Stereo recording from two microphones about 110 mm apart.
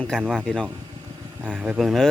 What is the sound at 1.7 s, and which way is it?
Speech, centre (ahead or behind).